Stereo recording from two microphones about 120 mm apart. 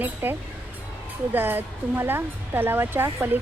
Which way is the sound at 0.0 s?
15° right (ahead or behind).